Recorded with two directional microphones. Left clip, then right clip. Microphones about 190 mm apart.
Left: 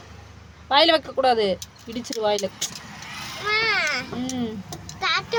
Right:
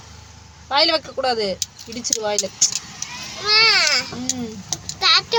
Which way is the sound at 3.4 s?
15° left (ahead or behind).